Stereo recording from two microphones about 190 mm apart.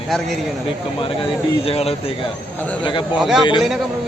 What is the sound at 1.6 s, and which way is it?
A man's voice, 30° left (ahead or behind).